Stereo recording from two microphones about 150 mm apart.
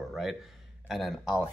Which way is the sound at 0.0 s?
Centre (ahead or behind).